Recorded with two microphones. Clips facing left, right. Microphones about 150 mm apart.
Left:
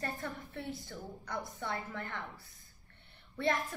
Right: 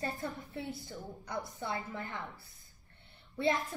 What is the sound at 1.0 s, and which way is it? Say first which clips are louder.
Speech: right 3 dB; centre (ahead or behind).